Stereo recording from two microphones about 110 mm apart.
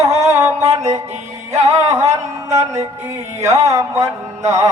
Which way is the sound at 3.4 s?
30° right (ahead or behind).